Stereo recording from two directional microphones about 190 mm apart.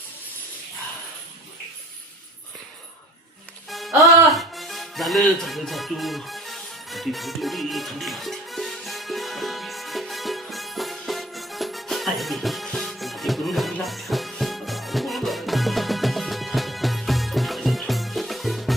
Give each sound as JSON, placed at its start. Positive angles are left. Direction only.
{"t": 3.7, "sound": "music", "side_deg": 0}